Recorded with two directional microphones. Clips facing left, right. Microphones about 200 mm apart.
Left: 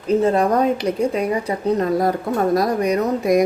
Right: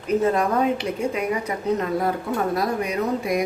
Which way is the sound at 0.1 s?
30° left (ahead or behind).